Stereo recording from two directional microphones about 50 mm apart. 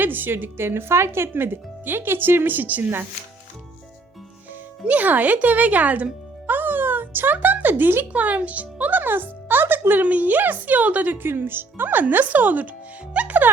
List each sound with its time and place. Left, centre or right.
0.0 s speech: right
1.3 s speech: right
4.9 s speech: right
6.5 s a sound: right
7.3 s speech: right
8.1 s a child's voice: right
11.1 s speech: right
13.1 s music: right